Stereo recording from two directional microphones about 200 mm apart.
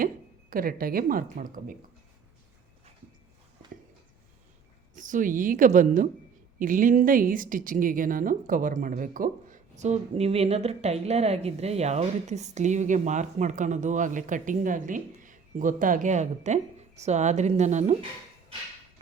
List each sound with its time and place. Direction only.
0.5 s speech: 45° right (ahead or behind)
4.9 s speech: 40° right (ahead or behind)